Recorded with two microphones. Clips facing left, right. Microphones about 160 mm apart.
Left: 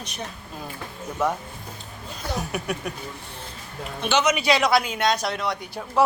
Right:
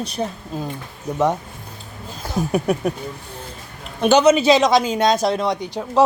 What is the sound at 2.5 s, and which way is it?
Speech, 35° right (ahead or behind).